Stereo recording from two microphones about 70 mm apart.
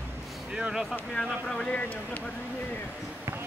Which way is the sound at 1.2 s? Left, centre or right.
Centre.